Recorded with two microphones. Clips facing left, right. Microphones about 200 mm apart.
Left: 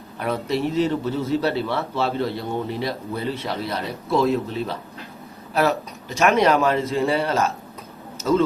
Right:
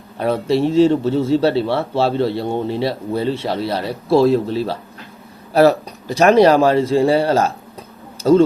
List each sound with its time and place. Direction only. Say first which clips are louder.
0.2 s a man's voice: right 7 dB; 30° right (ahead or behind)